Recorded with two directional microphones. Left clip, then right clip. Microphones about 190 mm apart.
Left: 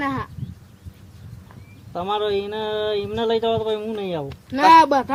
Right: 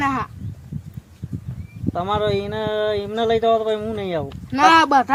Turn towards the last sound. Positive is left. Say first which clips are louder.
# left 1 dB
turn(degrees=-35)  # may be behind; listen again after turning